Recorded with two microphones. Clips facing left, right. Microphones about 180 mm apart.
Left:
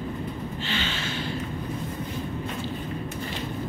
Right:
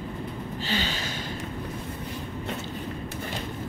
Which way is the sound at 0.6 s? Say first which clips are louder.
Right 2 dB; 40° right (ahead or behind).